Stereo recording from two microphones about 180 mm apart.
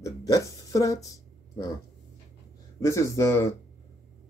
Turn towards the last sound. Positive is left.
turn(degrees=15)  # may be behind; listen again after turning